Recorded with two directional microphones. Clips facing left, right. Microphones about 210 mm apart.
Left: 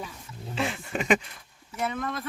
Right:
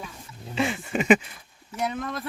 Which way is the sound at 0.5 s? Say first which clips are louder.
Right 4 dB; centre (ahead or behind).